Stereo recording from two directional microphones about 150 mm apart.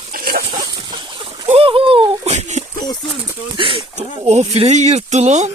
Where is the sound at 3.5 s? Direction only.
35° right (ahead or behind).